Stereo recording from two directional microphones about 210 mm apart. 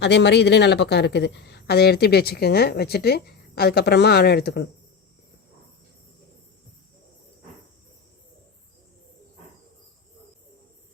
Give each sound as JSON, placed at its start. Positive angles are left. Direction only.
{"t": 0.0, "sound": "speech", "side_deg": 55}